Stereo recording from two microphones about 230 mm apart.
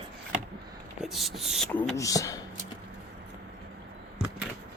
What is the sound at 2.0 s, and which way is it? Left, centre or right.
Speech, centre.